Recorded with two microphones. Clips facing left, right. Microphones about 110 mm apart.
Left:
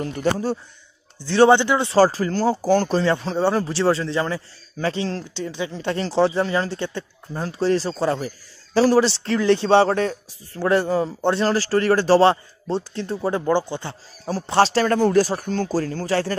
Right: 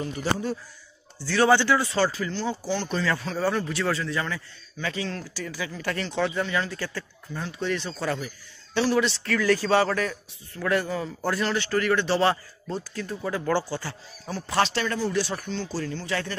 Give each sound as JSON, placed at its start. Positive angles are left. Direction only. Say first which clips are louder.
{"t": 0.0, "sound": "a man's voice", "louder": "left 6 dB", "side_deg": 60}
{"t": 1.2, "sound": "speech", "louder": "left 6 dB", "side_deg": 25}
{"t": 2.0, "sound": "a man's voice", "louder": "left 8 dB", "side_deg": 40}
{"t": 3.0, "sound": "a man's voice", "louder": "left 6 dB", "side_deg": 30}
{"t": 13.5, "sound": "speech", "louder": "left 2 dB", "side_deg": 20}
{"t": 14.2, "sound": "speech", "louder": "left 7 dB", "side_deg": 30}